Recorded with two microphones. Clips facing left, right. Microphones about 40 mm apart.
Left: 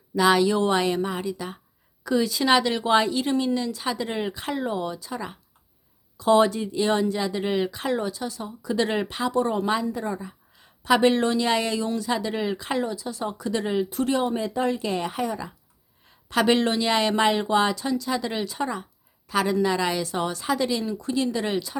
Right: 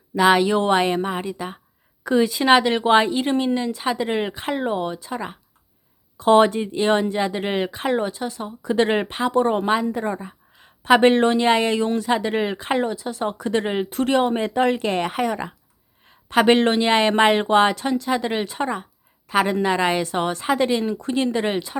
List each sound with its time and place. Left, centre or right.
0.2 s speech: right
16.0 s speech: right